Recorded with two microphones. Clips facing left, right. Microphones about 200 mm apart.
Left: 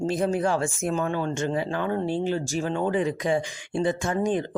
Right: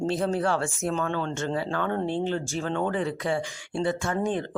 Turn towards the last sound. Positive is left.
turn(degrees=15)  # may be behind; listen again after turning